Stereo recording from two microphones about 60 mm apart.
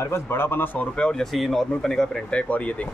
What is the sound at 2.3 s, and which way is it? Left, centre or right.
Speech, left.